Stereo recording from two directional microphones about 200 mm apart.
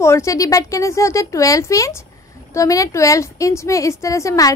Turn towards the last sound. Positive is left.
turn(degrees=15)  # may be behind; listen again after turning